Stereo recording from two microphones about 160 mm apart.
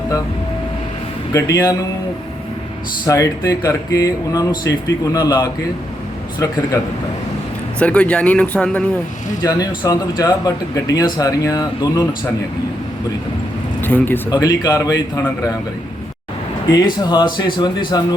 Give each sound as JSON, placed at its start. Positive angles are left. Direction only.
{"t": 1.3, "sound": "speech", "side_deg": 20}
{"t": 3.1, "sound": "speech", "side_deg": 20}
{"t": 7.8, "sound": "speech", "side_deg": 10}
{"t": 9.4, "sound": "speech", "side_deg": 20}
{"t": 13.8, "sound": "speech", "side_deg": 10}
{"t": 14.3, "sound": "speech", "side_deg": 25}
{"t": 16.7, "sound": "speech", "side_deg": 25}